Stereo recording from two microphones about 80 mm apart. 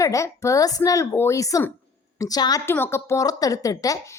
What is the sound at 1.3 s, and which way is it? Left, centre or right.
A woman's voice, left.